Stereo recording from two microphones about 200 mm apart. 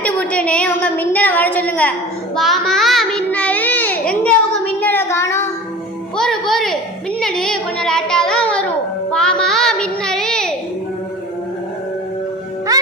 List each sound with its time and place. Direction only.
0.0 s a sound: 5° left (ahead or behind)
2.3 s child singing: centre (ahead or behind)
6.1 s music: centre (ahead or behind)
7.2 s a sound: centre (ahead or behind)
9.0 s music: 5° left (ahead or behind)
9.4 s child singing: centre (ahead or behind)
12.7 s music: 15° right (ahead or behind)